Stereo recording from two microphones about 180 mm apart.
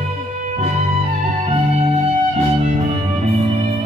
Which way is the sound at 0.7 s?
40° right (ahead or behind).